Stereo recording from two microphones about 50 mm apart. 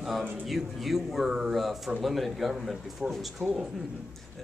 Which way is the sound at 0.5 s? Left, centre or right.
Centre.